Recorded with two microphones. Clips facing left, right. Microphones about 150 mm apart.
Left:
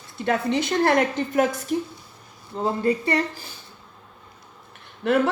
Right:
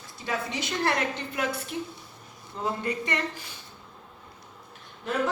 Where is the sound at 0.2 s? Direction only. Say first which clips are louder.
Left 9 dB; 55° left (ahead or behind); by 3.5 s 35° left (ahead or behind).